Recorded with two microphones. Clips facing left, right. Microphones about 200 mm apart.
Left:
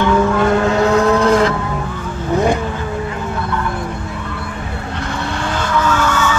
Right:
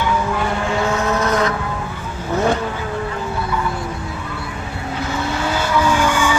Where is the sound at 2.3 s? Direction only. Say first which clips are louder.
Left 3 dB; 15° left (ahead or behind).